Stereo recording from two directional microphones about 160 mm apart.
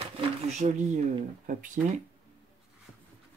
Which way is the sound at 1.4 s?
55° right (ahead or behind).